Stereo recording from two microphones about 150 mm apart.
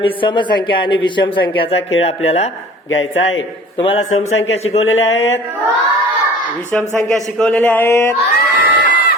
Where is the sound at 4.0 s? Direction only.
50° left (ahead or behind).